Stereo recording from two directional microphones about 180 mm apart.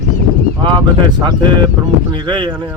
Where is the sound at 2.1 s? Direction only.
25° right (ahead or behind).